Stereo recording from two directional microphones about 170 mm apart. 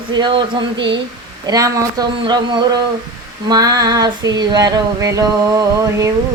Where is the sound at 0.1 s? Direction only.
25° right (ahead or behind).